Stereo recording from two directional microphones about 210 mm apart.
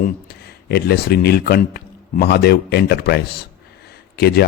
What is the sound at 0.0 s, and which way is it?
Speech, 50° left (ahead or behind).